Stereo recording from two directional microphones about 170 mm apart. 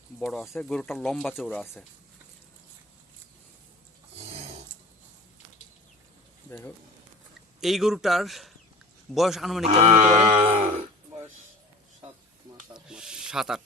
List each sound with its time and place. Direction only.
0.2 s speech: centre (ahead or behind)
6.5 s speech: 10° left (ahead or behind)
7.6 s speech: centre (ahead or behind)
9.6 s sheep: 45° right (ahead or behind)
12.7 s speech: 5° right (ahead or behind)